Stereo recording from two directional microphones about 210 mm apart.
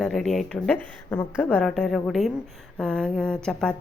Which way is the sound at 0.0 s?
Centre (ahead or behind).